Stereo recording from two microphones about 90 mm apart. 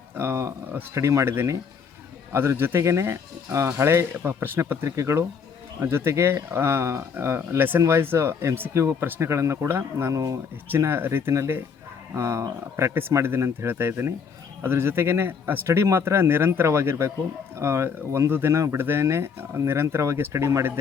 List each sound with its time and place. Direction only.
0.2 s speech: 25° right (ahead or behind)
10.7 s speech: 25° right (ahead or behind)